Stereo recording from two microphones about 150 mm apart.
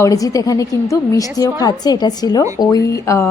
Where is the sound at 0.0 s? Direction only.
20° left (ahead or behind).